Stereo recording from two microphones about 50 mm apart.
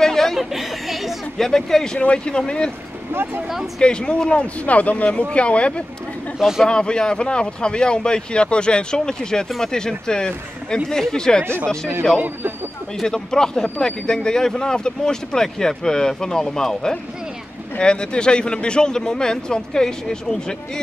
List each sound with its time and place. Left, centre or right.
0.0 s chatter: centre
0.4 s speech: centre
2.0 s speech: left
3.1 s speech: right
3.8 s speech: centre
4.6 s speech: left; by 11.9 s centre
13.0 s speech: centre